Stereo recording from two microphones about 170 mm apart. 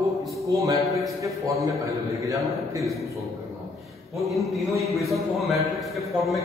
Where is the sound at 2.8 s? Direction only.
Centre (ahead or behind).